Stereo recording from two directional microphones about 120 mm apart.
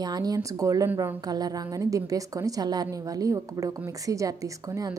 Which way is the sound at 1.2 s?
35° right (ahead or behind).